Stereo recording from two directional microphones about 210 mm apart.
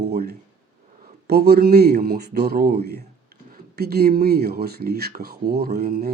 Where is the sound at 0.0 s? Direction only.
50° right (ahead or behind).